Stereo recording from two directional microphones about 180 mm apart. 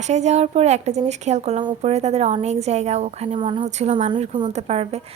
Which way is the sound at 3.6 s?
40° right (ahead or behind).